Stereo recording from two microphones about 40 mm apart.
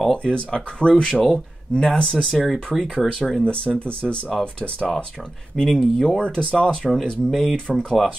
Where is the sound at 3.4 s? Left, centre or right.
Left.